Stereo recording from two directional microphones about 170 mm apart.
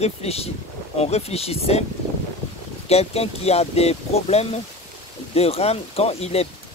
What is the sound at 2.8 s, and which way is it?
Speech, 35° left (ahead or behind).